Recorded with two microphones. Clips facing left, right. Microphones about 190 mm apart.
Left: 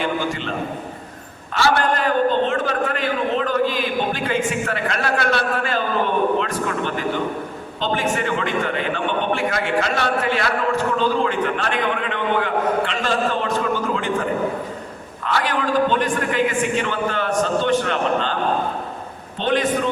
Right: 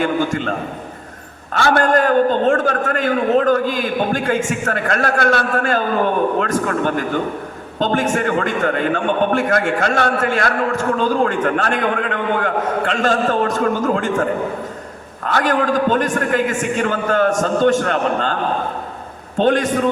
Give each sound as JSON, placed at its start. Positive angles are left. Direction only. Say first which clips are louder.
{"t": 0.0, "sound": "a man's voice", "louder": "right 5 dB", "side_deg": -45}
{"t": 1.5, "sound": "a man's voice", "louder": "right 4 dB", "side_deg": -50}
{"t": 19.4, "sound": "a man's voice", "louder": "right 4 dB", "side_deg": -45}